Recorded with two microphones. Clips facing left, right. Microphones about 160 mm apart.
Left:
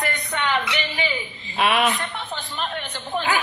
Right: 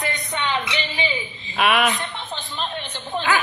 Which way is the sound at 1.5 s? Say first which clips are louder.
Right 1 dB; 35° left (ahead or behind).